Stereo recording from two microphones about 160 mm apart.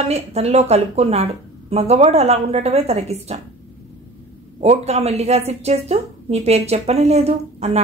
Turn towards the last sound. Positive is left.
turn(degrees=-40)  # may be behind; listen again after turning